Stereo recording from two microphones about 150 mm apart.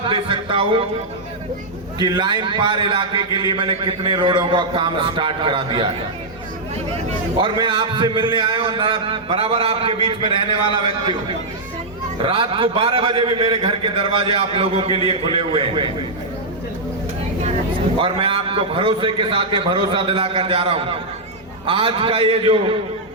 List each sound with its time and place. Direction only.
0.0 s a sound: 35° right (ahead or behind)
2.0 s a man's voice: 30° right (ahead or behind)
7.4 s a man's voice: 35° right (ahead or behind)
18.0 s a man's voice: 35° right (ahead or behind)